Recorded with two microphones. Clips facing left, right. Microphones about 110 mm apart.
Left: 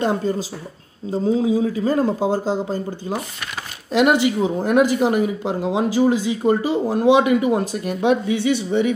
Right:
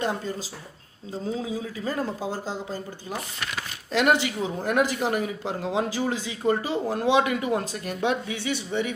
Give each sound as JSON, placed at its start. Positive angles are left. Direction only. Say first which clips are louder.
{"t": 0.0, "sound": "speech", "louder": "left 8 dB", "side_deg": 30}
{"t": 3.9, "sound": "speech", "louder": "left 6 dB", "side_deg": 15}